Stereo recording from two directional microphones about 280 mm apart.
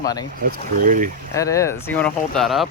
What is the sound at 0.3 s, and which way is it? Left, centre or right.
Speech, right.